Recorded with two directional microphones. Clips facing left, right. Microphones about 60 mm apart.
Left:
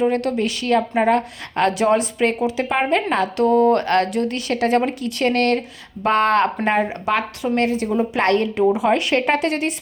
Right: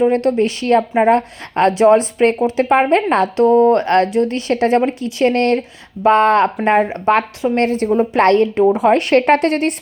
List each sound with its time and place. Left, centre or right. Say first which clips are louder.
0.1 s a woman's voice: right 5 dB; right